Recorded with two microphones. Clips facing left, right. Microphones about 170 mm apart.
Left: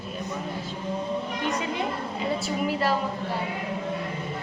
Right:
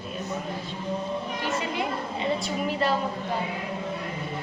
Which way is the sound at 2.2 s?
5° left (ahead or behind).